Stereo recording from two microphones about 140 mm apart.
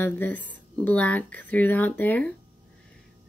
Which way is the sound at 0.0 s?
15° left (ahead or behind).